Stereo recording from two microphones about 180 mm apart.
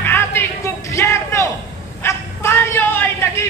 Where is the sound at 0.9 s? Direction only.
15° left (ahead or behind).